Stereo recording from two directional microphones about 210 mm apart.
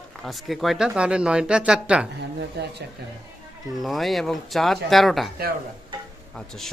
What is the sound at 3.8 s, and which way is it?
Speech, centre (ahead or behind).